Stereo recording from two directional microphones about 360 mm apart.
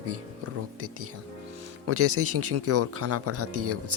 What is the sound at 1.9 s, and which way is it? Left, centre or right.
Speech, right.